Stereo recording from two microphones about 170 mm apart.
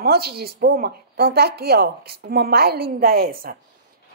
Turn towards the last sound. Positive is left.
turn(degrees=-60)  # may be behind; listen again after turning